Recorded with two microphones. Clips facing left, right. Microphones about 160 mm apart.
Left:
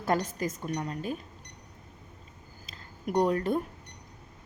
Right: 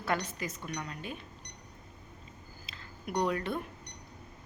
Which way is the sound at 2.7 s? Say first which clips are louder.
Left 6 dB; 45° left (ahead or behind).